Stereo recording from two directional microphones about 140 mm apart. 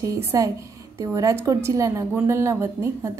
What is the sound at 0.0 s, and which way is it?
A woman's voice, 25° right (ahead or behind).